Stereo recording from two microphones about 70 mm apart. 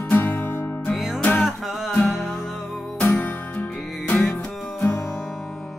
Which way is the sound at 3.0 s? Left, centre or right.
Left.